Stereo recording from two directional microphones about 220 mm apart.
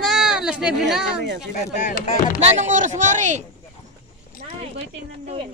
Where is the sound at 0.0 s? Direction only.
Centre (ahead or behind).